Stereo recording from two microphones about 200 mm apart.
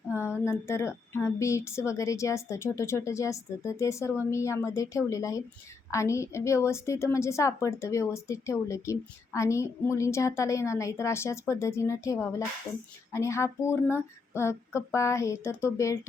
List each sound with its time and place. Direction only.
0.2 s a woman's voice: 15° left (ahead or behind)